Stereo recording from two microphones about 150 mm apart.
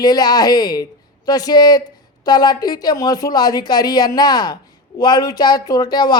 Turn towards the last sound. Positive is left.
turn(degrees=25)  # may be behind; listen again after turning